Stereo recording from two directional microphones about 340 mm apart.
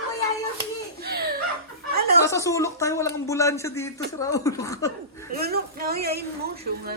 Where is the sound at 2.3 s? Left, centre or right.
Centre.